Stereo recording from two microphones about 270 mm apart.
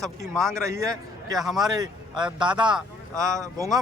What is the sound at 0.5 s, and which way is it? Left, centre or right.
Speech, centre.